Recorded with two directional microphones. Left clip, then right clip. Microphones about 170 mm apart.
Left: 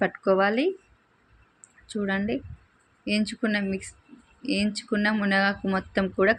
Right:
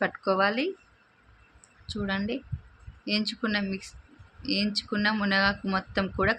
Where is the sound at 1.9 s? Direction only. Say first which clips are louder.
Left 3 dB; 20° left (ahead or behind).